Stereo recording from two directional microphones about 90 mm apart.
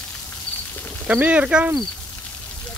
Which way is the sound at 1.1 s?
15° right (ahead or behind).